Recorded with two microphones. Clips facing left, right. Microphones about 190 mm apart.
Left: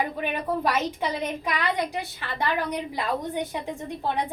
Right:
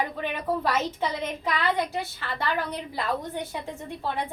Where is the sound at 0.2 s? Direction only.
15° left (ahead or behind).